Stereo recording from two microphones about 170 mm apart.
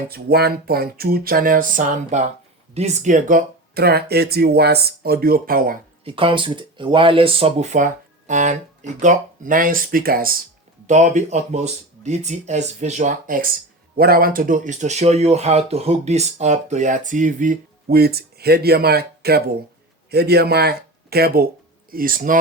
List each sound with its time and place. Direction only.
0.1 s speech: 65° right (ahead or behind)
6.1 s speech: 30° right (ahead or behind); by 10.3 s 60° right (ahead or behind)
10.8 s speech: 45° right (ahead or behind)
13.9 s speech: 65° right (ahead or behind)